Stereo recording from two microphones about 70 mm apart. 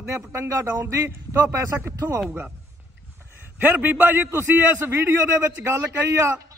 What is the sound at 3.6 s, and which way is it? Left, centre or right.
Speech, right.